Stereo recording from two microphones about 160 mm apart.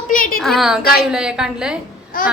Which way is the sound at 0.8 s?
70° left (ahead or behind).